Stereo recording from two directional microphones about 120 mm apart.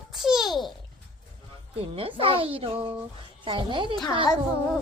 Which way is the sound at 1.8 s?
50° right (ahead or behind).